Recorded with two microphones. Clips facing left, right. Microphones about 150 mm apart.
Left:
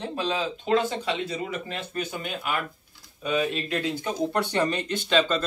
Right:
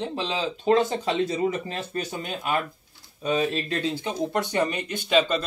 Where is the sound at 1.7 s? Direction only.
35° right (ahead or behind).